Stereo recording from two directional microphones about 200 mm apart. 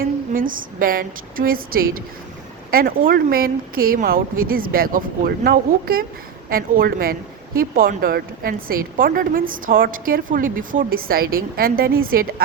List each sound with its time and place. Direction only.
0.0 s speech: 45° right (ahead or behind)